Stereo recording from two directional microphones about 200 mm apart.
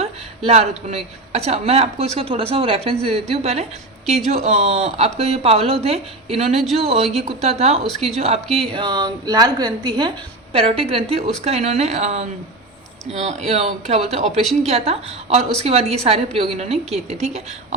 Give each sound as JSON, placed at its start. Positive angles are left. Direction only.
{"t": 0.0, "sound": "a woman's voice", "side_deg": -30}
{"t": 7.9, "sound": "speech", "side_deg": 0}
{"t": 8.1, "sound": "a woman's voice", "side_deg": -30}